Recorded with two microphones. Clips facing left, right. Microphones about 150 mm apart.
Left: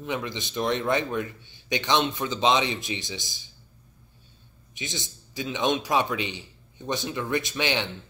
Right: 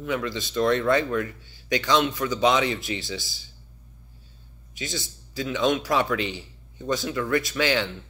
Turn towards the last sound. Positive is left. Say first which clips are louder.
# right 3 dB
turn(degrees=20)  # may be behind; listen again after turning